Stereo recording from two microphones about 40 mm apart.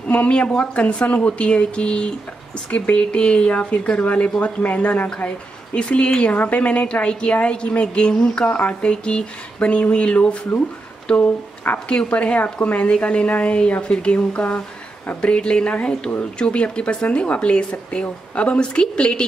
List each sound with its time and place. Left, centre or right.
0.1 s a woman's voice: left
6.3 s a woman's voice: left
11.7 s speech: left
12.1 s a woman's voice: left